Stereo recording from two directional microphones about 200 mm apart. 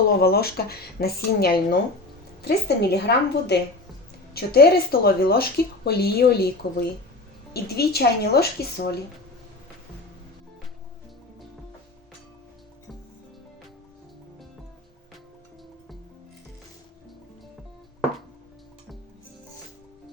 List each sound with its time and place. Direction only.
0.1 s a woman's voice: 50° left (ahead or behind)